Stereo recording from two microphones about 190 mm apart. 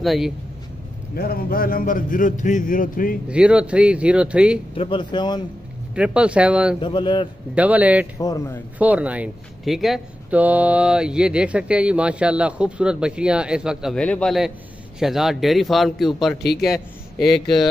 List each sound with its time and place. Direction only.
0.0 s speech: centre (ahead or behind)
1.1 s a man's voice: 50° left (ahead or behind)
3.3 s speech: 5° right (ahead or behind)
4.7 s speech: 25° left (ahead or behind)
5.9 s speech: 5° right (ahead or behind)
6.8 s speech: 25° left (ahead or behind)
7.5 s a man's voice: 10° right (ahead or behind)
8.2 s speech: 20° left (ahead or behind)
8.7 s a man's voice: 10° right (ahead or behind)